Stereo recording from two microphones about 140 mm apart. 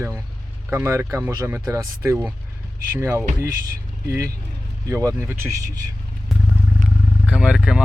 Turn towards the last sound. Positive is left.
turn(degrees=-5)  # may be behind; listen again after turning